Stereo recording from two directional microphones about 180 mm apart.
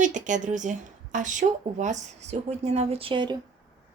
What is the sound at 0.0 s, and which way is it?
Speech, 45° right (ahead or behind).